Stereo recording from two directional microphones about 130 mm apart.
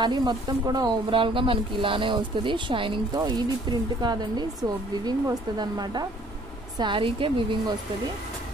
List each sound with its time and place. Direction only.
0.0 s speech: 35° right (ahead or behind)